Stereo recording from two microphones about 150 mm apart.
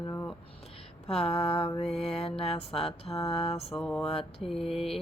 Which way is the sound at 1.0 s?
40° left (ahead or behind).